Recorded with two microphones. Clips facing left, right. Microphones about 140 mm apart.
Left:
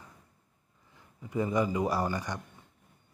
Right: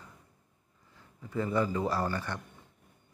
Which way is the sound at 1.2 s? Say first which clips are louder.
Left 1 dB; 15° left (ahead or behind).